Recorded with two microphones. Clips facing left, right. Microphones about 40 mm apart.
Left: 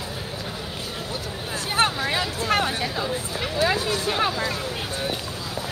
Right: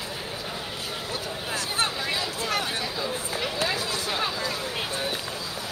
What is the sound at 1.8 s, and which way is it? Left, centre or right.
Speech, left.